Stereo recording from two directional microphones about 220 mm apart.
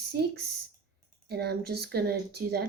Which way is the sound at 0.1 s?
45° right (ahead or behind).